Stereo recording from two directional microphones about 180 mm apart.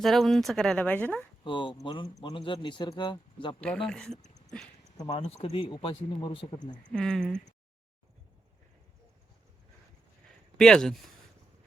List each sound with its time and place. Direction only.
0.0 s speech: centre (ahead or behind)
1.5 s speech: 25° left (ahead or behind)
3.6 s speech: 5° left (ahead or behind)
5.0 s speech: 35° left (ahead or behind)
6.9 s speech: 5° left (ahead or behind)
10.6 s speech: 5° left (ahead or behind)